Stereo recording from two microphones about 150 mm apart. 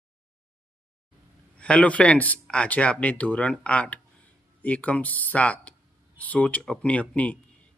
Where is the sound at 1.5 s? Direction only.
5° left (ahead or behind).